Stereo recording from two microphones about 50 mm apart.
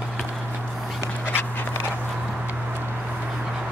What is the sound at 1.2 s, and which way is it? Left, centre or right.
Dog, left.